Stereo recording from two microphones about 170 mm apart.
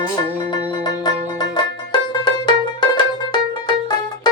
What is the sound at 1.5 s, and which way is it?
Music, 25° left (ahead or behind).